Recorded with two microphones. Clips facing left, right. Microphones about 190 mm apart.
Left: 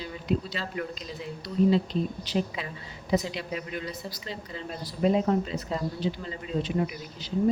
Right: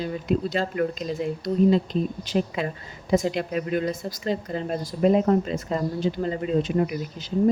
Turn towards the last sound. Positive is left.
turn(degrees=-50)  # may be behind; listen again after turning